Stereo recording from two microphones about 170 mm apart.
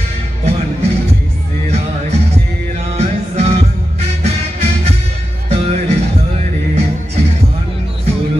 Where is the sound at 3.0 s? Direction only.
40° right (ahead or behind).